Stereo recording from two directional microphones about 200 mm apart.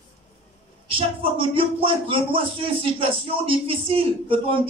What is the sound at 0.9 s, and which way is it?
Speech, 25° right (ahead or behind).